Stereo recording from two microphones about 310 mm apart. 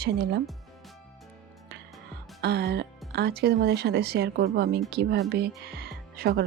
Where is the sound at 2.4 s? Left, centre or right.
Right.